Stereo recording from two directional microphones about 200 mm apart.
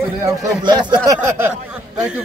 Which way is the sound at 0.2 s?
15° right (ahead or behind).